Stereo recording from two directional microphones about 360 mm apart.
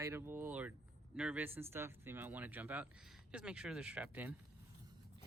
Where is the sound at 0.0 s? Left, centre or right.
Centre.